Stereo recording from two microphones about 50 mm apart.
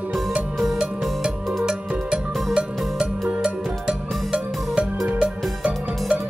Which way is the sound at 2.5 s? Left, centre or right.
Centre.